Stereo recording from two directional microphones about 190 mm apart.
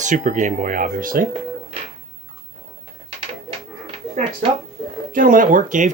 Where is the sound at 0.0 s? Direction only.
40° right (ahead or behind).